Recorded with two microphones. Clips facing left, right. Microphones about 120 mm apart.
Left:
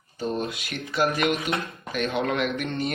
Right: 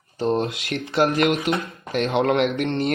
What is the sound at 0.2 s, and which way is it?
Speech, 90° right.